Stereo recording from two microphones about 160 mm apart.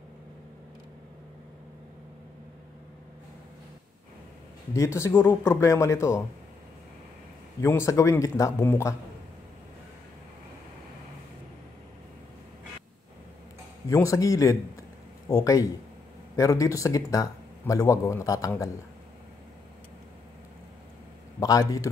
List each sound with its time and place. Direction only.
4.7 s speech: 20° left (ahead or behind)
7.6 s speech: 15° left (ahead or behind)
13.8 s speech: 20° left (ahead or behind)
21.4 s speech: 20° left (ahead or behind)